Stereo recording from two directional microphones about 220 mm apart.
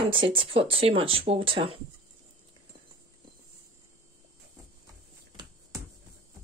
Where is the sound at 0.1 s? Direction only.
25° right (ahead or behind).